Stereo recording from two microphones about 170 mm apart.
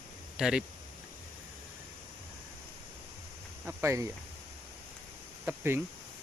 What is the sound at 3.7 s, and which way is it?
Speech, 15° right (ahead or behind).